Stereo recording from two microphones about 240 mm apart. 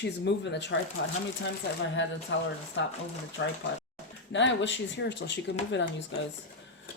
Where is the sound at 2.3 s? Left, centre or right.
Left.